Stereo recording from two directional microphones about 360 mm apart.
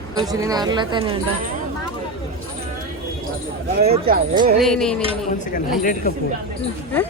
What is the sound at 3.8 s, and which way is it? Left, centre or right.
Speech, centre.